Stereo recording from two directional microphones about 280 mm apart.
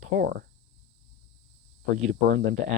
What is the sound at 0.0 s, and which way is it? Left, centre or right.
Speech, right.